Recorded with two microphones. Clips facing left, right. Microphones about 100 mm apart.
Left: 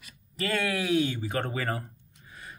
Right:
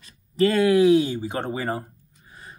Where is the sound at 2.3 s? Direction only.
30° right (ahead or behind).